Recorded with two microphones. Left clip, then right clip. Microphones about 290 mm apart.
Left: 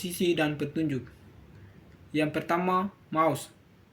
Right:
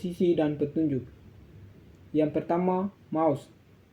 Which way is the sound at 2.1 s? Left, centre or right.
Left.